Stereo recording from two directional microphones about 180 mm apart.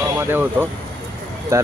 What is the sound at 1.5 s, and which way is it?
Speech, 15° right (ahead or behind).